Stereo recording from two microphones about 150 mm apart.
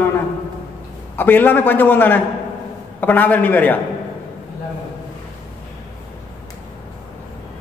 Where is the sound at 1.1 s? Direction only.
15° left (ahead or behind).